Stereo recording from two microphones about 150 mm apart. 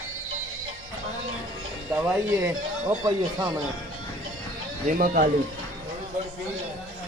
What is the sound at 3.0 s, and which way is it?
Speech, 25° right (ahead or behind).